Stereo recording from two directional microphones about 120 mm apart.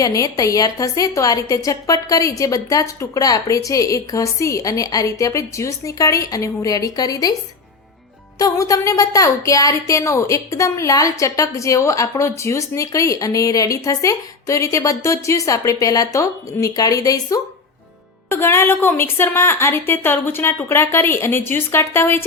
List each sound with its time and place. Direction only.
0.0 s a woman's voice: 30° left (ahead or behind)
8.4 s a woman's voice: 30° left (ahead or behind)
18.3 s a woman's voice: 20° left (ahead or behind)